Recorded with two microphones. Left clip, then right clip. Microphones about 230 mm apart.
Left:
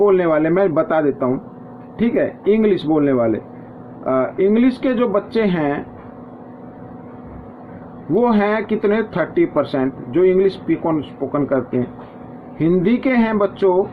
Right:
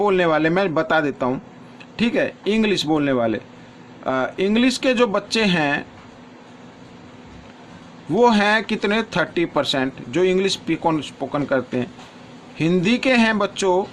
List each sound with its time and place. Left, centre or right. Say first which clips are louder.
0.0 s speech: left 3 dB; right
8.2 s speech: right 2 dB; right